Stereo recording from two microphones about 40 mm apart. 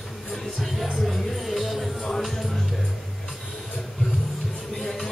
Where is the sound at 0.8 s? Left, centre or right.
Centre.